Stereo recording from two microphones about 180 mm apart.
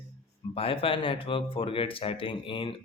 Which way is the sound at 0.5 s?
30° left (ahead or behind).